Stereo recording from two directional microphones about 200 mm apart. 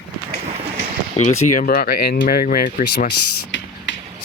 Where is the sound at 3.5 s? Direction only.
70° left (ahead or behind).